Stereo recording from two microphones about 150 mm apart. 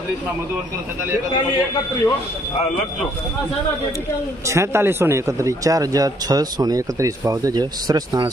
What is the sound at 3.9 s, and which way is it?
A man's voice, 20° right (ahead or behind).